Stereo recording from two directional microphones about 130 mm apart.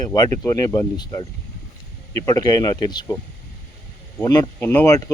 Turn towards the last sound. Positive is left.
turn(degrees=25)  # may be behind; listen again after turning